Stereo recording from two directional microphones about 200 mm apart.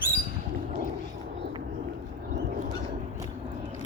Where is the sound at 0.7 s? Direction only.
40° right (ahead or behind).